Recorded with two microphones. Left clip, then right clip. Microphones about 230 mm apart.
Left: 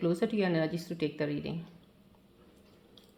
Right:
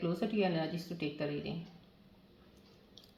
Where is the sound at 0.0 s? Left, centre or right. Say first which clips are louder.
Left 4 dB; left.